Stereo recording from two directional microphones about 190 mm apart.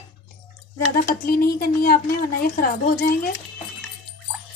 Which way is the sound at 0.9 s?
50° left (ahead or behind).